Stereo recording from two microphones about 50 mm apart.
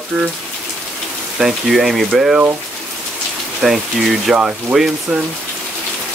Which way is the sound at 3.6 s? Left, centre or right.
Centre.